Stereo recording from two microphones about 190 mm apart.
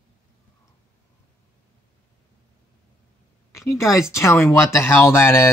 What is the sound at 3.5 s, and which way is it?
A woman's voice, 15° left (ahead or behind).